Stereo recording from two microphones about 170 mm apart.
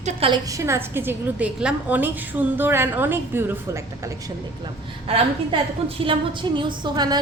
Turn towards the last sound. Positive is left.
turn(degrees=-25)  # may be behind; listen again after turning